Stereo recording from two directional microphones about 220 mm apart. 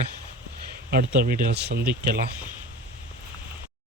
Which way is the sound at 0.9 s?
40° right (ahead or behind).